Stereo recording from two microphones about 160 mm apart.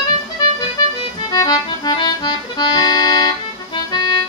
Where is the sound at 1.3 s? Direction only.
25° left (ahead or behind).